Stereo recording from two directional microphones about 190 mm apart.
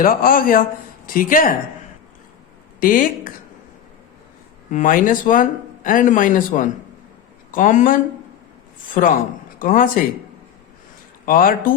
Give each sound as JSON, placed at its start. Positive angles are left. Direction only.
{"t": 0.0, "sound": "speech", "side_deg": 50}
{"t": 2.8, "sound": "speech", "side_deg": 45}
{"t": 4.7, "sound": "speech", "side_deg": 45}
{"t": 9.0, "sound": "speech", "side_deg": 45}
{"t": 11.3, "sound": "speech", "side_deg": 50}